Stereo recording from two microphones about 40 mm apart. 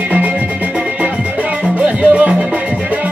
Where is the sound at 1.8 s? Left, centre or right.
Right.